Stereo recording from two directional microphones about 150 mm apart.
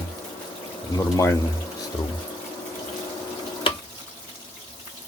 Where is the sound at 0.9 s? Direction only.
20° left (ahead or behind).